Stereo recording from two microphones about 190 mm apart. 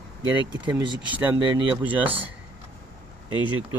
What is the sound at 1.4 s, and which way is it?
Speech, 25° right (ahead or behind).